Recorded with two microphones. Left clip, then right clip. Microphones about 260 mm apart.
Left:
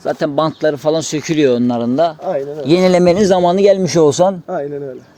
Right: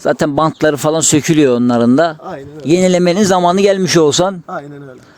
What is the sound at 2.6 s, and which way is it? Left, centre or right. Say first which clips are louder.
A man's voice: even; right.